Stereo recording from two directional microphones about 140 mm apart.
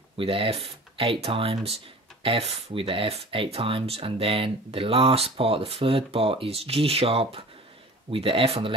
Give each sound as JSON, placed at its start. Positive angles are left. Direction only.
{"t": 0.2, "sound": "speech", "side_deg": -40}